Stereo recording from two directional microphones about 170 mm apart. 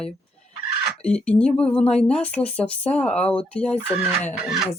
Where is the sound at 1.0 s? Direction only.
5° left (ahead or behind).